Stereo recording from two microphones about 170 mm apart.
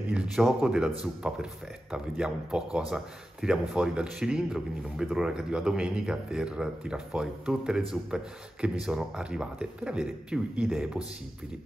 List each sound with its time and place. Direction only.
0.1 s a man's voice: 5° right (ahead or behind)